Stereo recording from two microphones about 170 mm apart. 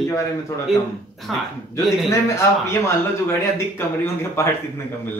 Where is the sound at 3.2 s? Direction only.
15° left (ahead or behind).